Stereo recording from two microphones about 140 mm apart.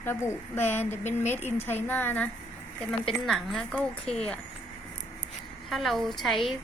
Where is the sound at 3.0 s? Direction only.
5° left (ahead or behind).